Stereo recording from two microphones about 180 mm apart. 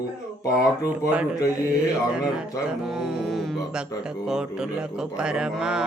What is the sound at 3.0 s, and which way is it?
Mantra, centre (ahead or behind).